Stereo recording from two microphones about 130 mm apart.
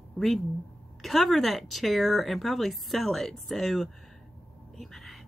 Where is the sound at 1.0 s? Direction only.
Centre (ahead or behind).